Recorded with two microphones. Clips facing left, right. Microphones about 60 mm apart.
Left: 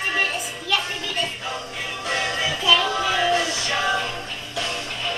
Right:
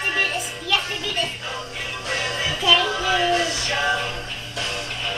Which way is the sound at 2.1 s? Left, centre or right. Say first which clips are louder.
Left 1 dB; left.